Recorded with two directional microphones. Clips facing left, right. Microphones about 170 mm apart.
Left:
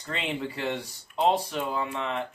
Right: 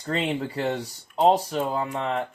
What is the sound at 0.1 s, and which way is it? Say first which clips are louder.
Speech: right 5 dB; 40° right (ahead or behind).